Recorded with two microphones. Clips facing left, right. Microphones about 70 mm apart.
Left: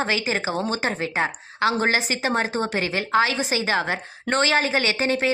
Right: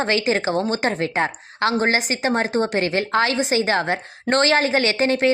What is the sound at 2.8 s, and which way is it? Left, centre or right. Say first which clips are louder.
A woman's voice: right 1 dB; right.